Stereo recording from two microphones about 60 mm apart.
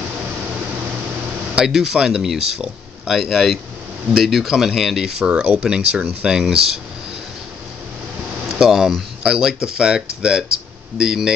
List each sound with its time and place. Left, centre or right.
1.5 s speech: centre
5.3 s speech: centre
8.5 s speech: centre